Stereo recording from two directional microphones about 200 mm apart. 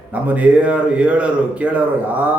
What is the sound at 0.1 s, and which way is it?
Speech, 5° right (ahead or behind).